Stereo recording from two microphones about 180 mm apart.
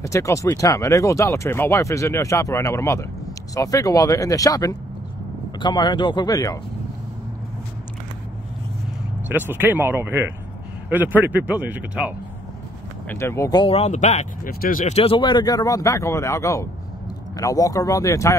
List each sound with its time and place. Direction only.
0.0 s a man's voice: 15° left (ahead or behind)
9.3 s speech: 10° right (ahead or behind)
13.1 s speech: 15° left (ahead or behind); by 14.5 s 40° left (ahead or behind)
14.5 s speech: 55° left (ahead or behind)
15.0 s a man's voice: 30° left (ahead or behind)